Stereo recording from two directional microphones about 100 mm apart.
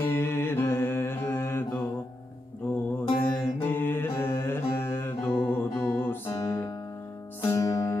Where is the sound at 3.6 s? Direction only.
20° left (ahead or behind); by 6.8 s 35° left (ahead or behind).